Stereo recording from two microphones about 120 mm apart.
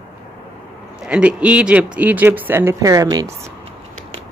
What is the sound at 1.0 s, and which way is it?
Speech, 10° right (ahead or behind).